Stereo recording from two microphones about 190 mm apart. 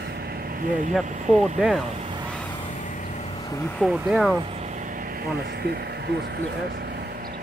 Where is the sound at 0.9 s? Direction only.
Centre (ahead or behind).